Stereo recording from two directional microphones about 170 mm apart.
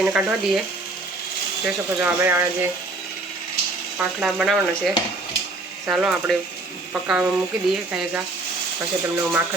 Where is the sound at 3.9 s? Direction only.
5° right (ahead or behind).